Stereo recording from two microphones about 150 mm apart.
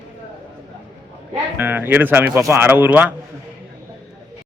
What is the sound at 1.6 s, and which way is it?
A man's voice, 15° right (ahead or behind).